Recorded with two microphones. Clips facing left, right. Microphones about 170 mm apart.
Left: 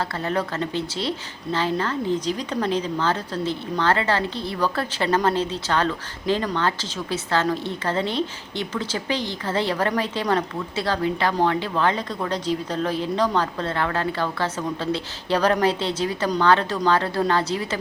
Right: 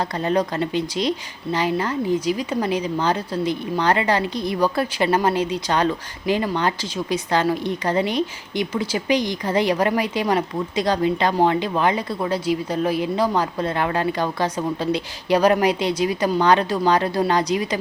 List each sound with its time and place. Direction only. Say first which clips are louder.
0.0 s a woman's voice: right 4 dB; 20° right (ahead or behind)